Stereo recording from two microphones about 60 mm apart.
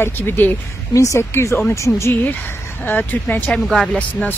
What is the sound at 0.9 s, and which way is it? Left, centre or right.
Speech, left.